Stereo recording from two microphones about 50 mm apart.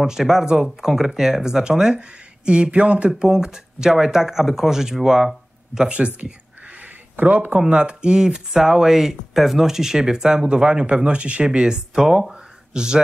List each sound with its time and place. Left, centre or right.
0.0 s speech: centre
5.8 s speech: right
6.8 s a sound: right
7.6 s speech: centre